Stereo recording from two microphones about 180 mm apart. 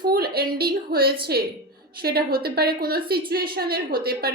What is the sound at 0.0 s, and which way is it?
A woman's voice, 60° right (ahead or behind).